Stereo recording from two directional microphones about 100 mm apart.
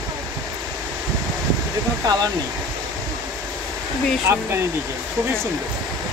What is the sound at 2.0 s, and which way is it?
Speech, 40° right (ahead or behind).